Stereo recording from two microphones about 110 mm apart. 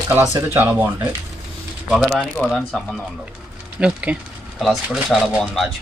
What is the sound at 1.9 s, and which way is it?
Speech, 5° right (ahead or behind).